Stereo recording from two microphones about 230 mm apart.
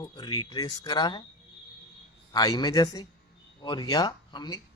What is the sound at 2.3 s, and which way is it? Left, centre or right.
A man's voice, centre.